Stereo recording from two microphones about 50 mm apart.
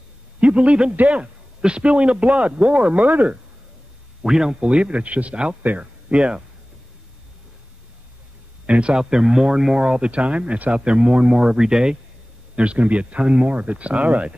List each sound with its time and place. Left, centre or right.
0.4 s a man's voice: right
4.2 s a man's voice: centre
8.6 s a man's voice: right
8.9 s speech: centre
12.5 s a man's voice: right